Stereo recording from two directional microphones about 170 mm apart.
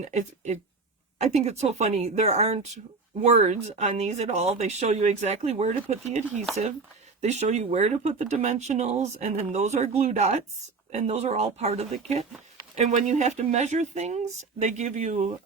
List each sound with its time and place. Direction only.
0.1 s speech: 45° right (ahead or behind)